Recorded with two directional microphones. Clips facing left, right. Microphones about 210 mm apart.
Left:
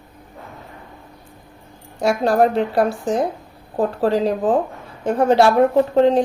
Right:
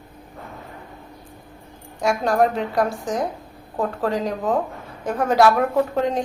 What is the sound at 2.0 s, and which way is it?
A woman's voice, 35° left (ahead or behind).